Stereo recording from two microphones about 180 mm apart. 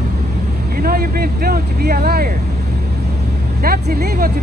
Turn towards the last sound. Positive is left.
turn(degrees=-60)  # may be behind; listen again after turning